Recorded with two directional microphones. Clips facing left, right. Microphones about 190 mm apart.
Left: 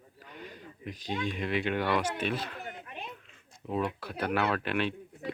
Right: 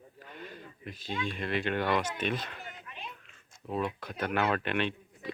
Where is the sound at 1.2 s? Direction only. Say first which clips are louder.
Left 1 dB; 15° left (ahead or behind).